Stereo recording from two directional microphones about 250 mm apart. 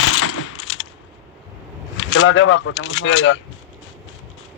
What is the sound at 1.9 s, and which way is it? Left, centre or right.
Speech, left.